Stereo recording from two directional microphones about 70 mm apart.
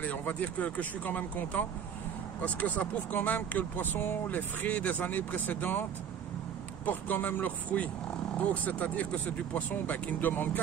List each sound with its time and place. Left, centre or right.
0.0 s speech: left
6.9 s speech: left